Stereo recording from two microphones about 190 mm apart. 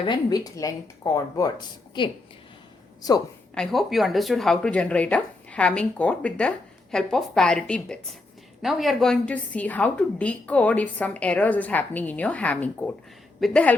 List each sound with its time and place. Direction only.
0.0 s speech: 25° left (ahead or behind)
3.5 s a woman's voice: centre (ahead or behind)